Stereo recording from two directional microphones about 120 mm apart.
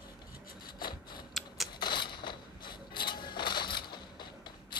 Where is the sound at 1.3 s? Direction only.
Centre (ahead or behind).